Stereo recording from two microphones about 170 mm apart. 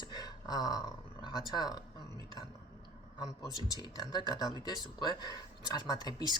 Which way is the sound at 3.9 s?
25° left (ahead or behind).